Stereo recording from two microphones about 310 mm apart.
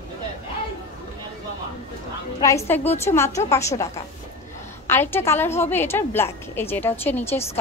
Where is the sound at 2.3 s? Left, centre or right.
Centre.